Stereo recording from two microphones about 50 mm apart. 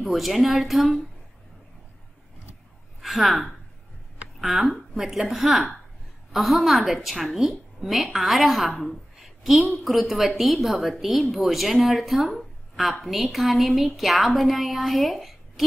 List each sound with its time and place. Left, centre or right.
0.0 s a woman's voice: centre
3.0 s a woman's voice: centre